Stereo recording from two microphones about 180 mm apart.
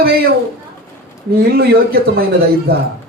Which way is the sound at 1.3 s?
60° right (ahead or behind).